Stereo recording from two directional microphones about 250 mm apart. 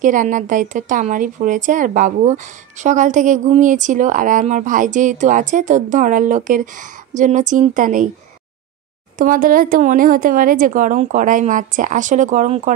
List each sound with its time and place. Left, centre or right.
0.0 s a woman's voice: right
9.2 s a woman's voice: right